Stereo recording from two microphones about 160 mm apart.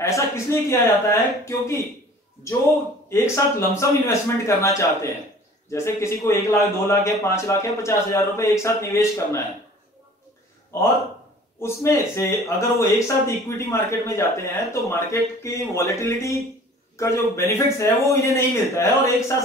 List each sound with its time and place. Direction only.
0.0 s speech: 20° left (ahead or behind)
3.1 s speech: 15° left (ahead or behind)
10.7 s speech: 15° left (ahead or behind)